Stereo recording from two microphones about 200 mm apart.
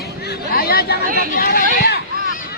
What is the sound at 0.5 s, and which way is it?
Chatter, 50° left (ahead or behind).